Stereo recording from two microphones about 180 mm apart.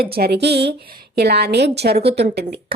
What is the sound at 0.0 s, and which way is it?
A woman's voice, 60° right (ahead or behind).